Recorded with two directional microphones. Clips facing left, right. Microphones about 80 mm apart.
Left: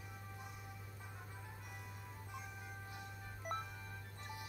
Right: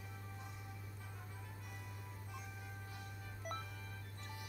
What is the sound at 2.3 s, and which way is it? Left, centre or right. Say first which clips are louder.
Music: left 3 dB; left.